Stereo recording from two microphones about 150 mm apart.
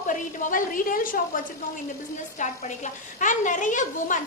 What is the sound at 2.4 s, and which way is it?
A woman's voice, 55° left (ahead or behind).